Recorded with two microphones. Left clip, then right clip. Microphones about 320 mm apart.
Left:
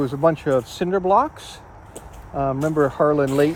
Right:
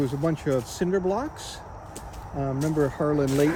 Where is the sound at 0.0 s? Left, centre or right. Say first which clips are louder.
Left 8 dB; centre.